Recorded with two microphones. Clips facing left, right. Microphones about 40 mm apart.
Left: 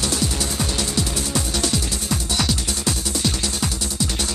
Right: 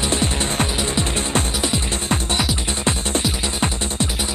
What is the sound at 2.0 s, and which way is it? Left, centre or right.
Music, right.